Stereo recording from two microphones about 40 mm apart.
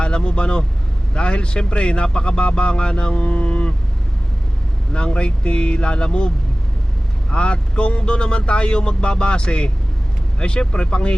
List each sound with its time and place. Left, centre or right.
0.0 s speech: left
4.9 s speech: left